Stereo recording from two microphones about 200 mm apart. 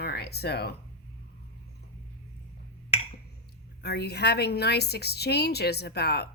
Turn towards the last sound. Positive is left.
turn(degrees=55)  # may be behind; listen again after turning